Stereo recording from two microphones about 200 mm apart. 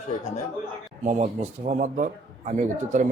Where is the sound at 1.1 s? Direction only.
35° right (ahead or behind).